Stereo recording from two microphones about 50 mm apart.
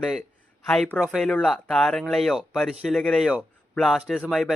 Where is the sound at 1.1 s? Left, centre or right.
Centre.